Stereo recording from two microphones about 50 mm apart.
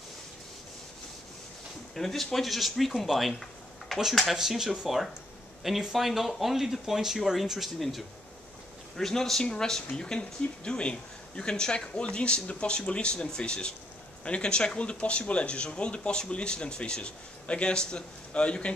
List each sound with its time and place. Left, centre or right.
2.0 s speech: centre
3.9 s a sound: centre
4.3 s speech: centre
8.9 s speech: centre